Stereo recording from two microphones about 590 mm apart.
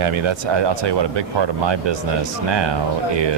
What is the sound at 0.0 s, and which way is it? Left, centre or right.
Speech, right.